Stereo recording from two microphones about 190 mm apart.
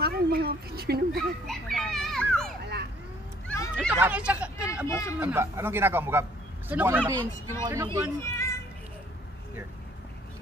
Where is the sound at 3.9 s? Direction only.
10° right (ahead or behind).